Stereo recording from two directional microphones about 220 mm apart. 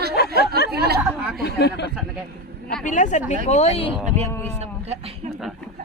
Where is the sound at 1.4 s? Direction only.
50° left (ahead or behind).